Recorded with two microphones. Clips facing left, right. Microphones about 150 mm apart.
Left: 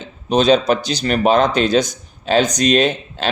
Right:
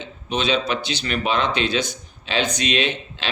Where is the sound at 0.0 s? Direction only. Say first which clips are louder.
Left 9 dB; 40° left (ahead or behind).